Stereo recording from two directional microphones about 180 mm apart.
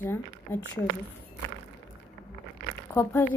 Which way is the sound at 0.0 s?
10° left (ahead or behind).